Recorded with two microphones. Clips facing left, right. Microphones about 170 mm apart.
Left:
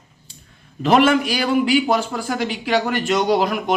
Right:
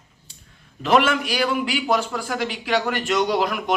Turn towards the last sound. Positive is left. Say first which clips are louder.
# left 3 dB
turn(degrees=30)  # may be behind; listen again after turning